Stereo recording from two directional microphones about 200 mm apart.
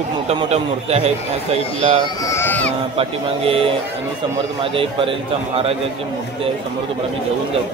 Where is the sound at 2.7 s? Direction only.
30° right (ahead or behind).